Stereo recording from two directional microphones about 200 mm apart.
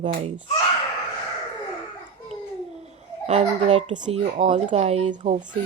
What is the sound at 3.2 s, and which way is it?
Speech, 35° right (ahead or behind).